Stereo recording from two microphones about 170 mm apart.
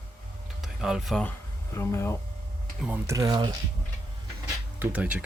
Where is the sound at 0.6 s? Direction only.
5° right (ahead or behind).